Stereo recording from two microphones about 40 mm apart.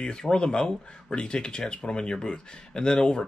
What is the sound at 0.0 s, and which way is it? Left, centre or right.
Speech, centre.